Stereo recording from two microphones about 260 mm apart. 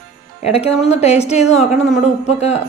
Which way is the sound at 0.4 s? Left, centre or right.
Left.